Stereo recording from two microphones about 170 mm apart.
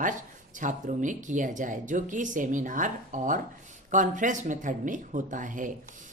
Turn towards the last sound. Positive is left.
turn(degrees=-50)  # may be behind; listen again after turning